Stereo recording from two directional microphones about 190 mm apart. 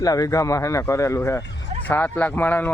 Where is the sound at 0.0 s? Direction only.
20° left (ahead or behind).